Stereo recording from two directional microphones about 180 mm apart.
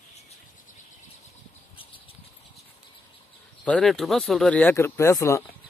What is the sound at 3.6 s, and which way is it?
Speech, 5° left (ahead or behind).